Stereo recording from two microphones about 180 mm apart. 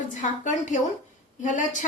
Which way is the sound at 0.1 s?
45° left (ahead or behind).